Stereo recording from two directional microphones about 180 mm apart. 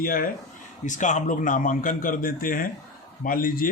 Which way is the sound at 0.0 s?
50° left (ahead or behind).